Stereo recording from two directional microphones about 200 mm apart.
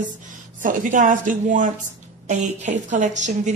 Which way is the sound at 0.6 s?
40° right (ahead or behind).